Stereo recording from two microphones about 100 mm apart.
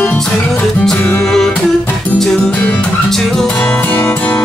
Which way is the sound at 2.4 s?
15° left (ahead or behind).